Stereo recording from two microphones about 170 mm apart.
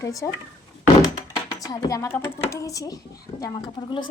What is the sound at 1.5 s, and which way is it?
A woman's voice, 20° left (ahead or behind).